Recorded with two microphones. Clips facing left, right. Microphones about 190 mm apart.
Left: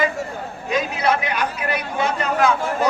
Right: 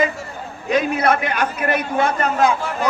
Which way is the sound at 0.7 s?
55° right (ahead or behind).